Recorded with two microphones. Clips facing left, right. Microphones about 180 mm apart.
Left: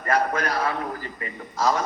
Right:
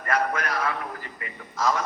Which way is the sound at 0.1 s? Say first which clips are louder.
Left 3 dB; 35° left (ahead or behind).